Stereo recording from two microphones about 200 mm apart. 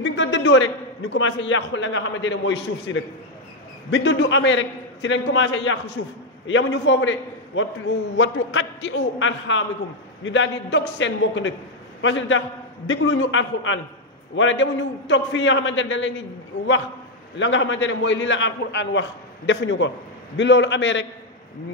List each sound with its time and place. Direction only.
0.0 s a sound: 65° left (ahead or behind)
1.1 s a man's voice: 70° left (ahead or behind)
17.4 s a man's voice: 70° left (ahead or behind)